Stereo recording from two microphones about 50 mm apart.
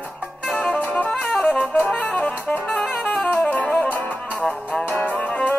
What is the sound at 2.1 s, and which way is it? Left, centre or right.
Music, left.